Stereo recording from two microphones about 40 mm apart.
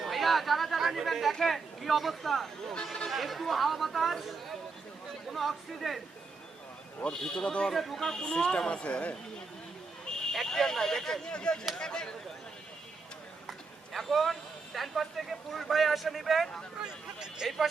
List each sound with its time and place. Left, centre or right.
0.0 s speech: centre
1.3 s speech: centre
7.0 s a woman's voice: left
7.7 s speech: centre
8.0 s a woman's voice: centre
10.1 s a sound: centre
10.4 s speech: centre
11.3 s a woman's voice: left
13.5 s speech: centre
16.8 s speech: centre